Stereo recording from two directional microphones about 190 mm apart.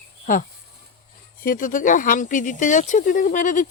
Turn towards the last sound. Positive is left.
turn(degrees=40)  # may be behind; listen again after turning